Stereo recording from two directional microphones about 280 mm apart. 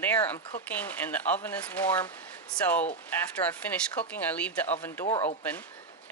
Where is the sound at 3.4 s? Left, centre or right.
Centre.